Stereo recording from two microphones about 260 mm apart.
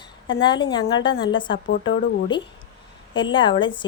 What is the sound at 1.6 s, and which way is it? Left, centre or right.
Speech, left.